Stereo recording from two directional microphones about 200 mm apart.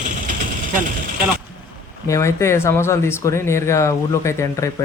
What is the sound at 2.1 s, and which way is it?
Speech, 15° left (ahead or behind).